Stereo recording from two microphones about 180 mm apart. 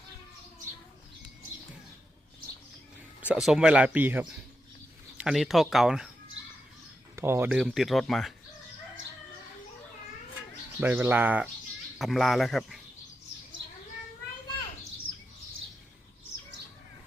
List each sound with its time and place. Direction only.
3.2 s speech: 5° right (ahead or behind)
7.2 s speech: 15° right (ahead or behind)
10.8 s speech: 10° right (ahead or behind)
13.6 s bird: 80° right